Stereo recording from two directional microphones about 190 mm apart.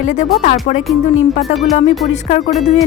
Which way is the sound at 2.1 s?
35° left (ahead or behind).